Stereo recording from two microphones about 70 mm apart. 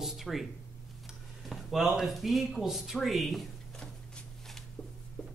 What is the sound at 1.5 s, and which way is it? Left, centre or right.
Speech, centre.